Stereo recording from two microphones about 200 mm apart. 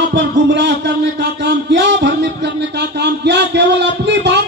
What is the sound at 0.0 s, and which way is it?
Speech, 60° right (ahead or behind).